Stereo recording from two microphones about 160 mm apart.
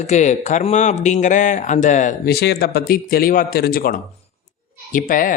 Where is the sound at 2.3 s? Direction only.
80° left; by 5.3 s 60° left (ahead or behind).